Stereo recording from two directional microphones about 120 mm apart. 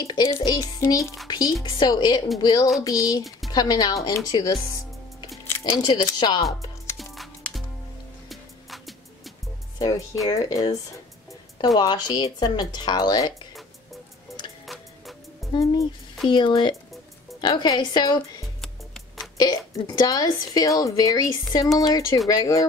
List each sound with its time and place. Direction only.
0.0 s a woman's voice: 35° left (ahead or behind)
5.7 s speech: 35° left (ahead or behind)
7.0 s music: centre (ahead or behind)
9.8 s a woman's voice: 30° left (ahead or behind)
14.7 s music: centre (ahead or behind)
15.6 s speech: 25° left (ahead or behind)
16.3 s a woman's voice: 40° left (ahead or behind)
18.6 s music: 5° left (ahead or behind)
19.3 s a woman's voice: 30° left (ahead or behind)